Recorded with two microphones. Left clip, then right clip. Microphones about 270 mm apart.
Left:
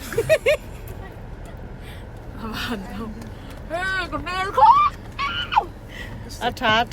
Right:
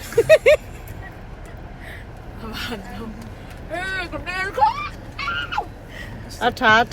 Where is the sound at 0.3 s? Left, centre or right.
Right.